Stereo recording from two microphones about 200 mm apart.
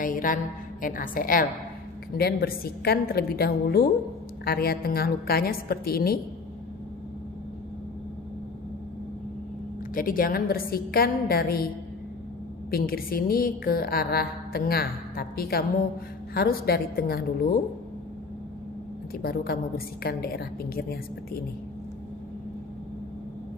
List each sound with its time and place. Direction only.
0.0 s mantra: 45° left (ahead or behind)
0.8 s a woman's voice: 45° left (ahead or behind)
9.9 s a woman's voice: 45° left (ahead or behind)
12.7 s a woman's voice: 45° left (ahead or behind)
19.1 s a woman's voice: 50° left (ahead or behind)